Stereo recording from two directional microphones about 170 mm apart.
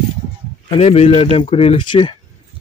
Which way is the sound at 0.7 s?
35° left (ahead or behind).